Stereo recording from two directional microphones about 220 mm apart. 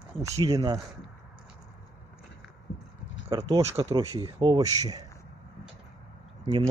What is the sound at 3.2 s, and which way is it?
Speech, 15° right (ahead or behind).